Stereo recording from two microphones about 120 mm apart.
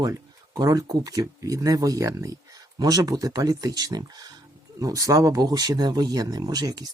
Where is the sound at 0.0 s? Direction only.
30° right (ahead or behind).